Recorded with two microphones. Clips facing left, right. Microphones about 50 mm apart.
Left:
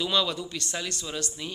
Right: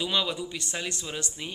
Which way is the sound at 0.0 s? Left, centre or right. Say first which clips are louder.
Left 2 dB; centre.